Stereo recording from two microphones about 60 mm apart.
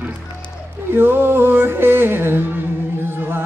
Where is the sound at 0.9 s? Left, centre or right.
Right.